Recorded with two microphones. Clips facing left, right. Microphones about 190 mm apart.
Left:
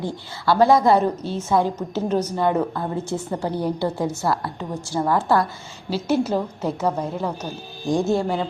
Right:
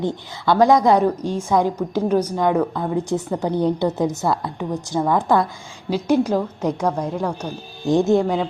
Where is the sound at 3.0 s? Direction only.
15° right (ahead or behind).